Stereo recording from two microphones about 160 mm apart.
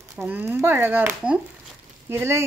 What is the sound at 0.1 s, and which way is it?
Speech, 5° right (ahead or behind).